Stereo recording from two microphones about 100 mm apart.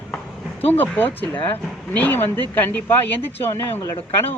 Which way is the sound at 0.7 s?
20° left (ahead or behind).